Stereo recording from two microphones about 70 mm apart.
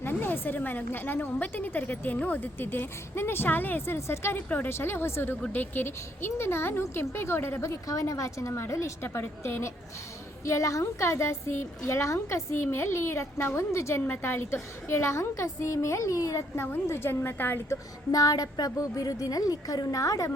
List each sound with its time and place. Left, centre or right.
0.0 s a woman's voice: left
4.4 s a woman's voice: left
16.6 s a woman's voice: left
18.1 s a woman's voice: left